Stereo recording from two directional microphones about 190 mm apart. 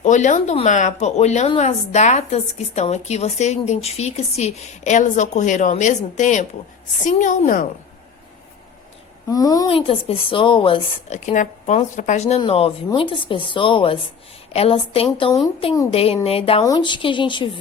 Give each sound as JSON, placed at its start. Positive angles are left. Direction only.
{"t": 0.0, "sound": "a woman's voice", "side_deg": 40}
{"t": 9.3, "sound": "a woman's voice", "side_deg": 20}